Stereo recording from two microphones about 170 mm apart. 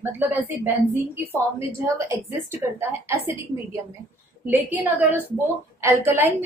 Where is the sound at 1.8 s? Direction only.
15° right (ahead or behind).